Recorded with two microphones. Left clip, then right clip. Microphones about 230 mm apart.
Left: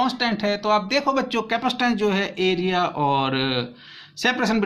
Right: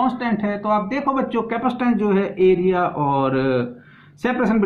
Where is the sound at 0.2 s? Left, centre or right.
Left.